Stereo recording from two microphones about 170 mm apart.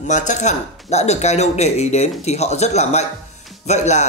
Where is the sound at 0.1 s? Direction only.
45° left (ahead or behind).